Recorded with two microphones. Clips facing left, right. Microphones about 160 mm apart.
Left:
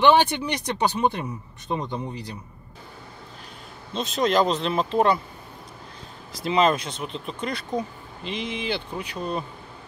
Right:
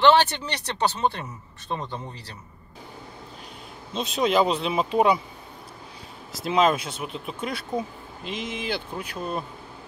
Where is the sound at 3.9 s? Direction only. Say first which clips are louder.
Even; 5° right (ahead or behind).